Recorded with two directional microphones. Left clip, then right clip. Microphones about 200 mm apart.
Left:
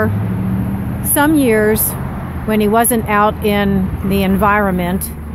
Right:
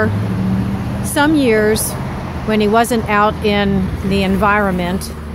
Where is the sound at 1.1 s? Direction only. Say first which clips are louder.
Even; 5° left (ahead or behind).